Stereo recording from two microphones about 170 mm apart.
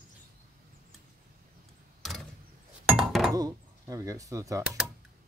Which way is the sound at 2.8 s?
5° right (ahead or behind).